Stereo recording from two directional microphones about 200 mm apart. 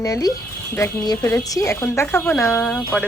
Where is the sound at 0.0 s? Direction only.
15° left (ahead or behind).